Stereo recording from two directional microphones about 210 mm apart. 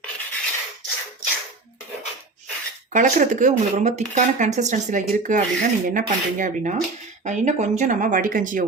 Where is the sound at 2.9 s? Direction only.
35° right (ahead or behind).